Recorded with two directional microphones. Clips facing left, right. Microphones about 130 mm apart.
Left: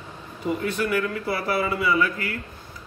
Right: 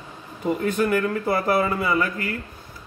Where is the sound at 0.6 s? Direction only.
45° right (ahead or behind).